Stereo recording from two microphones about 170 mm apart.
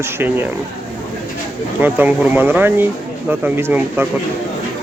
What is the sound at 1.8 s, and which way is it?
A man's voice, 10° right (ahead or behind).